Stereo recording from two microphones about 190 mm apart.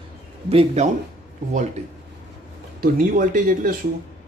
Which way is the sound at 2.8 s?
45° right (ahead or behind).